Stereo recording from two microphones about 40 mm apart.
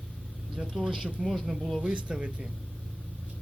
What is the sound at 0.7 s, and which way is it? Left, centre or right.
Speech, centre.